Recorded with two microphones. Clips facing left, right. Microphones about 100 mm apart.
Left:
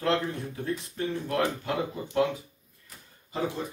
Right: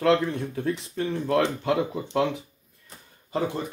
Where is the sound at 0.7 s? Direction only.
85° right.